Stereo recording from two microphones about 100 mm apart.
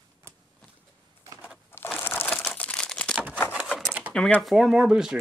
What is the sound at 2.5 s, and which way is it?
Crumpling, 10° left (ahead or behind).